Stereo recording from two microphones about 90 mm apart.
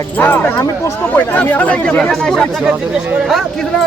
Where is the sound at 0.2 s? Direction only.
20° left (ahead or behind).